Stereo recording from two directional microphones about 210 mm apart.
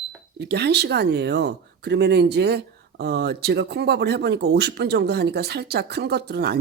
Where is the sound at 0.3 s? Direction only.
50° right (ahead or behind).